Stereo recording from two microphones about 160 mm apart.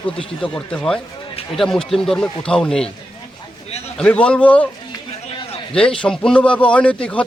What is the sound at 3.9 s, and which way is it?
Speech, 5° left (ahead or behind).